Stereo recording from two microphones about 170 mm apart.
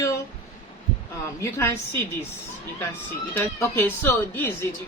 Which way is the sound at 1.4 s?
15° left (ahead or behind).